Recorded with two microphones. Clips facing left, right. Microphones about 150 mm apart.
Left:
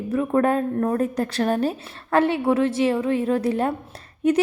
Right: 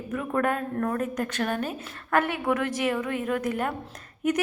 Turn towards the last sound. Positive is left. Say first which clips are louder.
# left 6 dB
turn(degrees=30)  # may be behind; listen again after turning